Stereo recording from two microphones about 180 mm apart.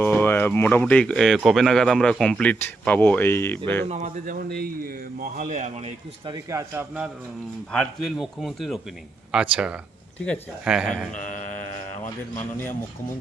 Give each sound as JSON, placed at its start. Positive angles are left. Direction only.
{"t": 0.0, "sound": "speech", "side_deg": 10}
{"t": 3.8, "sound": "a man's voice", "side_deg": -40}
{"t": 6.3, "sound": "a man's voice", "side_deg": -15}
{"t": 7.7, "sound": "a man's voice", "side_deg": 5}
{"t": 10.2, "sound": "a man's voice", "side_deg": 10}